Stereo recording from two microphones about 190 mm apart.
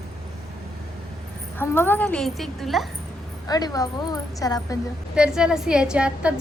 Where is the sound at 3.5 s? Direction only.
20° left (ahead or behind).